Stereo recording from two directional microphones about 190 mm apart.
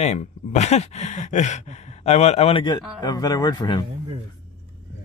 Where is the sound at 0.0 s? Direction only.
35° left (ahead or behind); by 3.8 s 20° left (ahead or behind).